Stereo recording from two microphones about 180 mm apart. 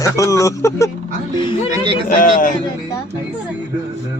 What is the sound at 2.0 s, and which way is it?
Speech, 50° left (ahead or behind).